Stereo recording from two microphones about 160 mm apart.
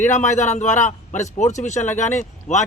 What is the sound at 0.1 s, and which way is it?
A man's voice, 50° left (ahead or behind).